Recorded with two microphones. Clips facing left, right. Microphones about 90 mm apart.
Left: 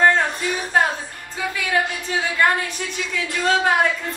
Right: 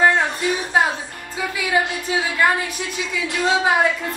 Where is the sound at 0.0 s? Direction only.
10° right (ahead or behind).